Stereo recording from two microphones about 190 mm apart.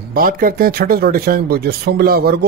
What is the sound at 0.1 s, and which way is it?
Speech, 50° right (ahead or behind).